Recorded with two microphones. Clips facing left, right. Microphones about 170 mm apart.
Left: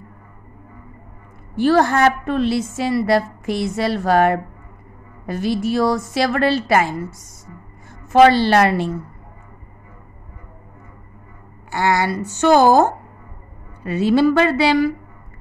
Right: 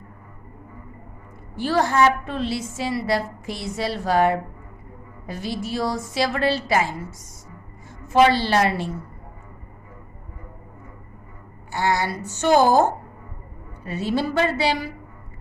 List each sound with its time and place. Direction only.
1.6 s a woman's voice: 60° left (ahead or behind)
11.7 s a woman's voice: 80° left
13.8 s a woman's voice: 90° left